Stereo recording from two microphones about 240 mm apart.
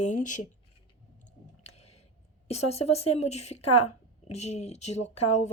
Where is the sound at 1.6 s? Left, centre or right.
Left.